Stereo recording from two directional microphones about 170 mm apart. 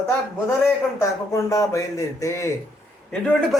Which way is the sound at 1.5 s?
20° left (ahead or behind).